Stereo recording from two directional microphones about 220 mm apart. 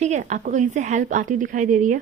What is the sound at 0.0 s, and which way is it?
Speech, 30° right (ahead or behind).